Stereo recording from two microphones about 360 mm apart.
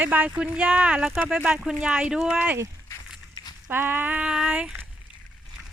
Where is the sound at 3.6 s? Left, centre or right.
Centre.